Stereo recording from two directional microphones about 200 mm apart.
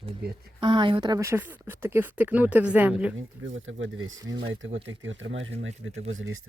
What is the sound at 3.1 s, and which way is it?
Speech, 75° right (ahead or behind).